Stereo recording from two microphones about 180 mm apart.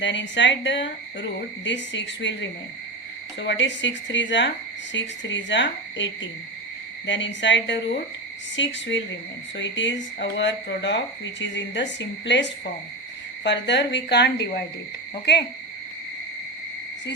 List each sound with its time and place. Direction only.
0.0 s speech: 80° left